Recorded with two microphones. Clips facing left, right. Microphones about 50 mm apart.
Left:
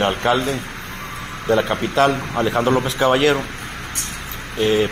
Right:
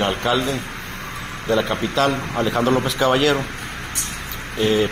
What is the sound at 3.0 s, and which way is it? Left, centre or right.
Speech, centre.